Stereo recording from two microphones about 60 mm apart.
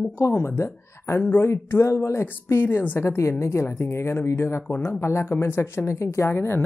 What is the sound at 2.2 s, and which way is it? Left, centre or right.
Speech, left.